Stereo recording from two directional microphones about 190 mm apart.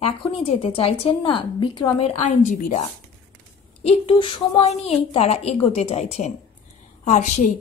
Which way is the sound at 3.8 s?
25° left (ahead or behind).